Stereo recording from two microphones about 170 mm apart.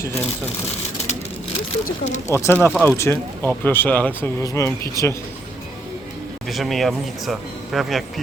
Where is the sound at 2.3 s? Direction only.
15° left (ahead or behind).